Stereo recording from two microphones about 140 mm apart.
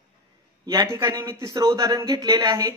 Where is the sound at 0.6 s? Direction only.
25° right (ahead or behind).